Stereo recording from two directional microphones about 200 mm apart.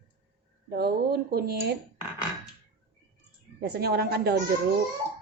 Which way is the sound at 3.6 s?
55° right (ahead or behind).